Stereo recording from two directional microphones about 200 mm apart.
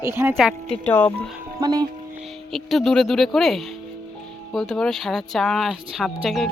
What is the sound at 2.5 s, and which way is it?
Speech, centre (ahead or behind).